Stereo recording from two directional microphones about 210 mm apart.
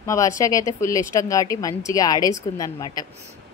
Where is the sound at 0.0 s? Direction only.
15° left (ahead or behind).